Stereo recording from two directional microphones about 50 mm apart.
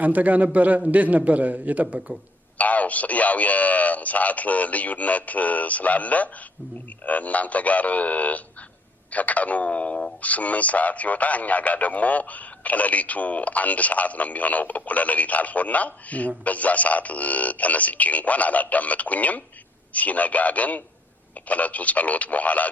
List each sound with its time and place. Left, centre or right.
0.0 s a man's voice: right
2.6 s speech: left